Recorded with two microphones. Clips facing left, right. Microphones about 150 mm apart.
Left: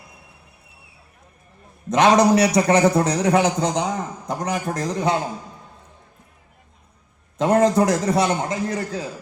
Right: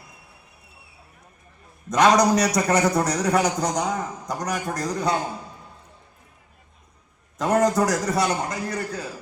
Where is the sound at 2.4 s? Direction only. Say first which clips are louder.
Left 4 dB; 25° left (ahead or behind).